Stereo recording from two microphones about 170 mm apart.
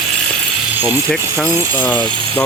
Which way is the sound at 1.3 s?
15° right (ahead or behind).